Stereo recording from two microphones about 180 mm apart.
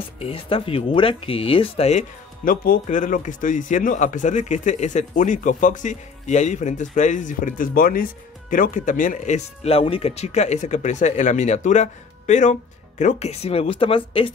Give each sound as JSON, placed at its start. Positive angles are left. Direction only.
{"t": 0.2, "sound": "speech", "side_deg": 30}